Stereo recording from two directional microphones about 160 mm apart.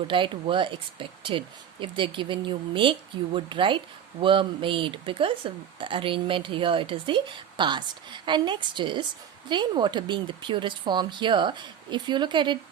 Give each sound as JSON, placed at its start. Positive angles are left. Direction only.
{"t": 0.1, "sound": "speech", "side_deg": -30}